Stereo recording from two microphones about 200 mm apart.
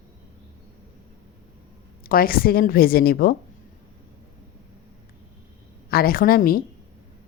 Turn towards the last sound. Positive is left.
turn(degrees=45)  # may be behind; listen again after turning